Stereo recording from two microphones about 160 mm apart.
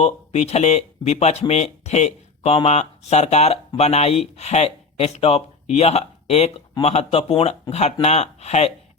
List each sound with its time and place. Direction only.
0.0 s speech: 40° left (ahead or behind)